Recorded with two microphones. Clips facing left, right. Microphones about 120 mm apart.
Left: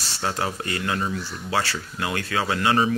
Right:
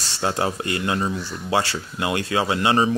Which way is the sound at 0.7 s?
25° right (ahead or behind).